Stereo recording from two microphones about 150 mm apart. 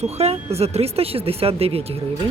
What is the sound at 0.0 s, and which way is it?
Speech, 45° right (ahead or behind).